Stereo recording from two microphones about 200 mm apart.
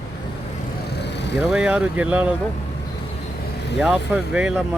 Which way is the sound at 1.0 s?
60° left (ahead or behind).